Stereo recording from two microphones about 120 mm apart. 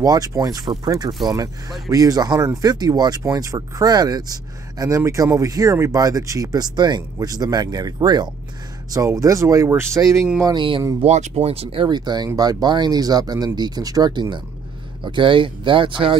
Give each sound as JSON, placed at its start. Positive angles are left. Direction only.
{"t": 0.0, "sound": "speech", "side_deg": -30}
{"t": 10.4, "sound": "speech", "side_deg": -40}
{"t": 11.0, "sound": "speech", "side_deg": -70}